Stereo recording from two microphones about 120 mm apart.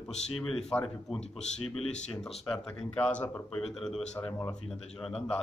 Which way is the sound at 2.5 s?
5° left (ahead or behind).